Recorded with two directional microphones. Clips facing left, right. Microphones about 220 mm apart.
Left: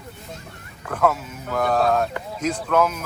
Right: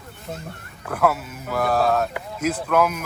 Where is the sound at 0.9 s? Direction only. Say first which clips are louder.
Even; 5° right (ahead or behind).